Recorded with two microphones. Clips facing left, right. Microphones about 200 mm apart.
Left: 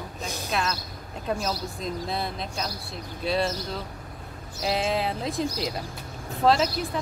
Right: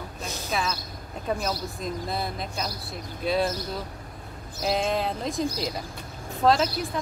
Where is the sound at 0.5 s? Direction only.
Centre (ahead or behind).